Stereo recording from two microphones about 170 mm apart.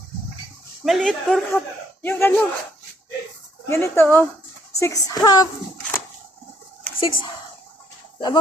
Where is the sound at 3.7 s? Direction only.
15° left (ahead or behind).